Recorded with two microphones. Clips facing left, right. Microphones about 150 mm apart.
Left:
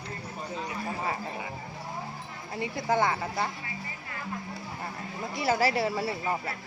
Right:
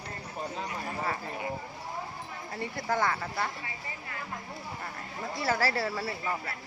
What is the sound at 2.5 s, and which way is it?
Speech, 15° left (ahead or behind).